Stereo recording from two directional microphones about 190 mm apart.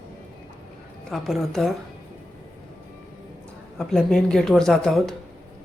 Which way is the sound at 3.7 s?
5° left (ahead or behind).